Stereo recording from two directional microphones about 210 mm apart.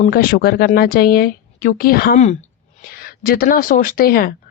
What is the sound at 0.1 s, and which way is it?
Speech, 45° left (ahead or behind).